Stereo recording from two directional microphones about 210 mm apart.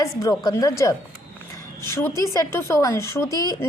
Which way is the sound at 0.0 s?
15° left (ahead or behind).